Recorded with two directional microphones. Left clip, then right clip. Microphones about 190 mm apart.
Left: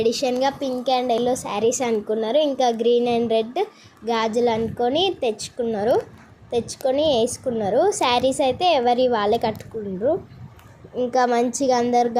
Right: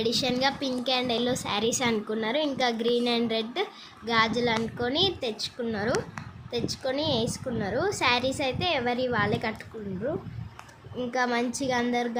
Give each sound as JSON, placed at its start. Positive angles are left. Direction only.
{"t": 0.0, "sound": "a woman's voice", "side_deg": 15}
{"t": 11.1, "sound": "a woman's voice", "side_deg": 15}